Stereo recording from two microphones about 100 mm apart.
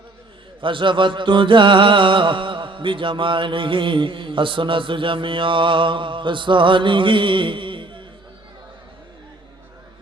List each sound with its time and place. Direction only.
0.6 s music: 55° right (ahead or behind)